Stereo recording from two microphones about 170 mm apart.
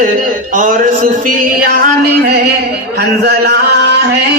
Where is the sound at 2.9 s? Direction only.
75° right (ahead or behind).